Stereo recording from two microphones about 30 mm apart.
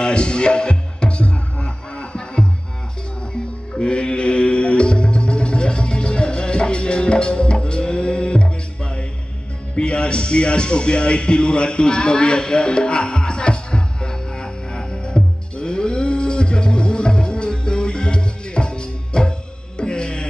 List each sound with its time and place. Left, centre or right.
0.0 s music: left
3.7 s music: left